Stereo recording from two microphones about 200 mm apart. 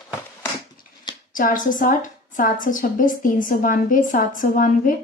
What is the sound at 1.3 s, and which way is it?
A woman's voice, 40° left (ahead or behind).